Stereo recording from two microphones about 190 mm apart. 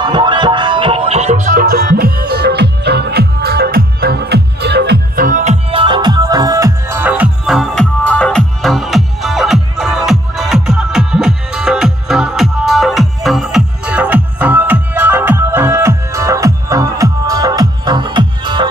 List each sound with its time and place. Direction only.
0.0 s music: 25° right (ahead or behind)